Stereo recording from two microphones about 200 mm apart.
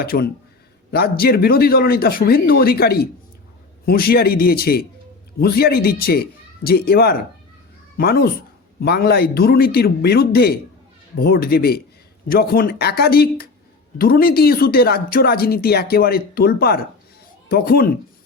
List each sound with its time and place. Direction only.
0.0 s speech: 50° left (ahead or behind)